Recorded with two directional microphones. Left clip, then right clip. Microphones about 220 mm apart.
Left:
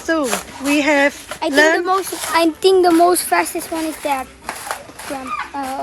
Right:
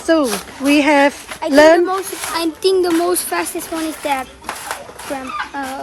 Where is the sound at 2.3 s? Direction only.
15° left (ahead or behind); by 4.5 s 5° right (ahead or behind).